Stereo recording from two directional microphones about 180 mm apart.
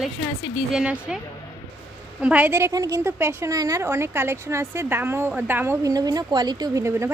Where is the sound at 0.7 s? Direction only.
5° right (ahead or behind).